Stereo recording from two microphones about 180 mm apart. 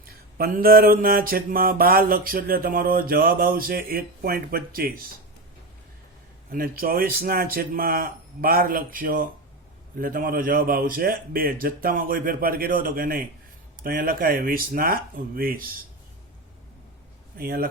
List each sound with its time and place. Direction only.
0.0 s mantra: 55° right (ahead or behind)
6.5 s a man's voice: 55° right (ahead or behind)
17.3 s mantra: 55° right (ahead or behind)